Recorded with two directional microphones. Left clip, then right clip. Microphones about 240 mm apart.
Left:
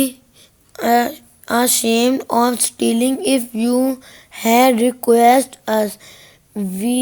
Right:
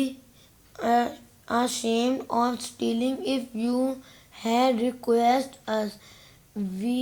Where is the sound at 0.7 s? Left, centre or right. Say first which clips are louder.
Left 8 dB; left.